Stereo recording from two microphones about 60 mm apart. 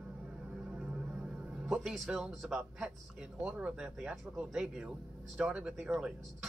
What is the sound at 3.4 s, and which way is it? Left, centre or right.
Speech, centre.